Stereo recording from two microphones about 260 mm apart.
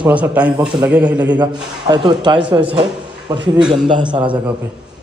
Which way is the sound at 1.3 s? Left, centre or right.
Centre.